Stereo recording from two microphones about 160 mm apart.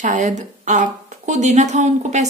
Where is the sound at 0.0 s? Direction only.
50° right (ahead or behind).